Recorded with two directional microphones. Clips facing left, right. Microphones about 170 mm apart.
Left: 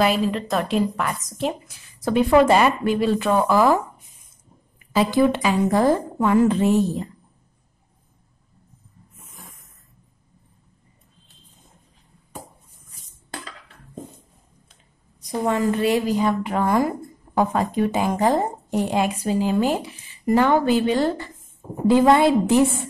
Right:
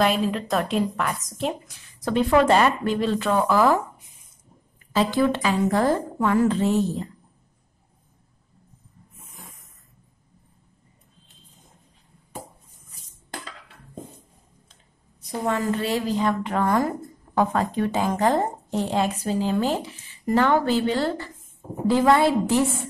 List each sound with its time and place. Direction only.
0.0 s a woman's voice: centre (ahead or behind)
15.4 s a woman's voice: 15° left (ahead or behind)